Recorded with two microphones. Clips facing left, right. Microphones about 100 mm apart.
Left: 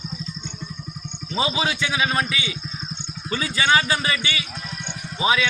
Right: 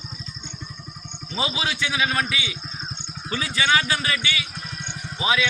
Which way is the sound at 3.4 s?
30° left (ahead or behind).